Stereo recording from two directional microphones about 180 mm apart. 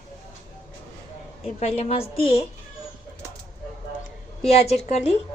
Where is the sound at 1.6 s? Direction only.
35° left (ahead or behind).